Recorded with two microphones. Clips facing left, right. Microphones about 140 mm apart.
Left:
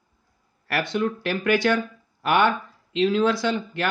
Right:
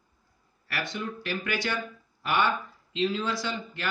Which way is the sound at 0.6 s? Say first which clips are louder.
Left 9 dB; 60° left (ahead or behind).